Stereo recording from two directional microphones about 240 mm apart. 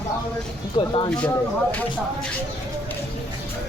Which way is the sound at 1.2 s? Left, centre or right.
Centre.